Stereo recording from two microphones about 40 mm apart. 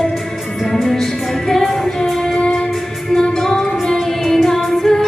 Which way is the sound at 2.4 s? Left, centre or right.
Left.